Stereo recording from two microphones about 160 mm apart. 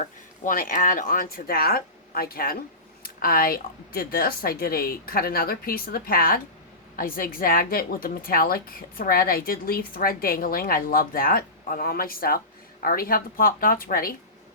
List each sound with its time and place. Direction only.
0.4 s a woman's voice: 55° left (ahead or behind)